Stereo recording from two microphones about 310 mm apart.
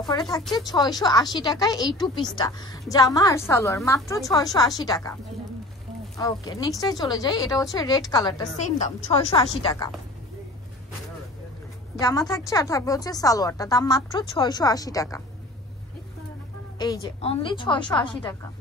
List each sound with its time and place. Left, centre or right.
0.1 s speech: centre
6.1 s speech: centre
12.1 s speech: centre
16.7 s speech: centre